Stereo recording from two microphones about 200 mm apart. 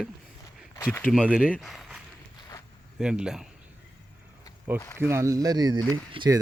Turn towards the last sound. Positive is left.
turn(degrees=-25)  # may be behind; listen again after turning